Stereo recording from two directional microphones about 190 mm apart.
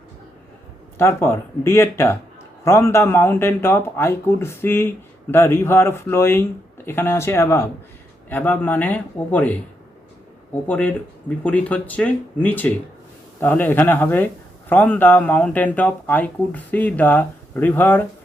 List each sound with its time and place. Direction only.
0.9 s speech: 15° left (ahead or behind)
10.7 s speech: 10° left (ahead or behind)